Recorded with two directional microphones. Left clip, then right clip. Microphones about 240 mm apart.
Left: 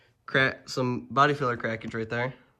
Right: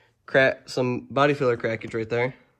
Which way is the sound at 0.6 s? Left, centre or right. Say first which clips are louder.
Right 4 dB; centre.